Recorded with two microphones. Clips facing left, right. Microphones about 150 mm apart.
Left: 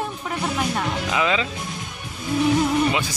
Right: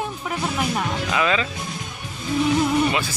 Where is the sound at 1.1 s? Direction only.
15° left (ahead or behind).